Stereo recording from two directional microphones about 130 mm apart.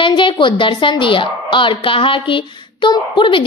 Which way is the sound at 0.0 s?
40° left (ahead or behind).